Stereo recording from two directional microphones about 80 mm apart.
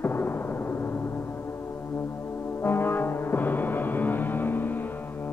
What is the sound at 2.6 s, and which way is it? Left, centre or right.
Music, left.